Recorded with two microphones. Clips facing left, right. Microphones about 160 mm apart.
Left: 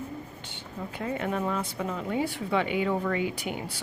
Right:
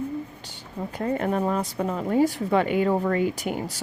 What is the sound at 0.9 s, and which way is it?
Speech, 40° right (ahead or behind).